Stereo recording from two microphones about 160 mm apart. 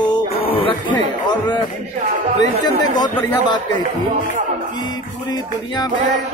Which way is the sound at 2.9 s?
25° left (ahead or behind).